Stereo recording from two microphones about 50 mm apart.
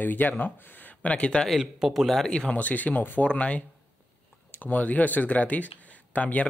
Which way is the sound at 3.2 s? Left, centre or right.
Left.